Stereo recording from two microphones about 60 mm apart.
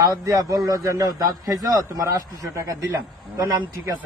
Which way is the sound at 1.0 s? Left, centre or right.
Right.